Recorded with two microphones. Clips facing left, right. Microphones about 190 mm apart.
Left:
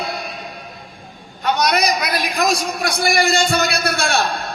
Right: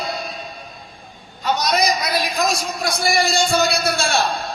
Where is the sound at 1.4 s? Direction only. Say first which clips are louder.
Left 2 dB; 60° left (ahead or behind).